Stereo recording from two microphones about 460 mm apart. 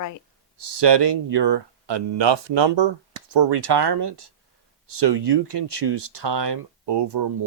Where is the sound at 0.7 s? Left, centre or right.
Right.